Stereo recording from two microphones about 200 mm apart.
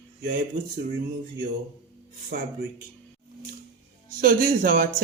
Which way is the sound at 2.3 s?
55° right (ahead or behind).